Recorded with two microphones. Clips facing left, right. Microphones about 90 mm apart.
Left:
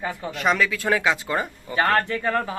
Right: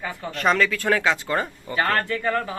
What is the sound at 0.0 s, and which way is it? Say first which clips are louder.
Speech: left 2 dB; 25° left (ahead or behind).